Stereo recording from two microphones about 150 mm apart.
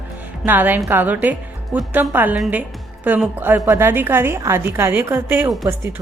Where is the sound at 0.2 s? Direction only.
10° right (ahead or behind).